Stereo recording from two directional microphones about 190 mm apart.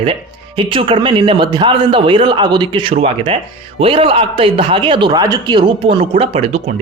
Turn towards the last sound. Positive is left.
turn(degrees=-35)  # may be behind; listen again after turning